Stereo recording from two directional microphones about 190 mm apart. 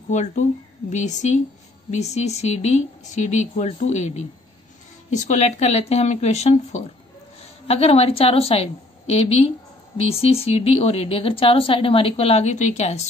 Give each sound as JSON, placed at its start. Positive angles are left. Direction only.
{"t": 0.1, "sound": "speech", "side_deg": 40}